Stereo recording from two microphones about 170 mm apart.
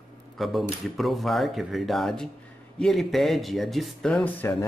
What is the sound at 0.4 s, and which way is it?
Speech, centre (ahead or behind).